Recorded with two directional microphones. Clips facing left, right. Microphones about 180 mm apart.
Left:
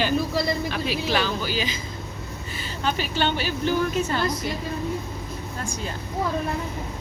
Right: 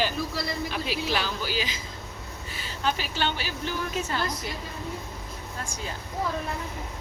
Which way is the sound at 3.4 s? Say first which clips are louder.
Left 7 dB; 55° left (ahead or behind).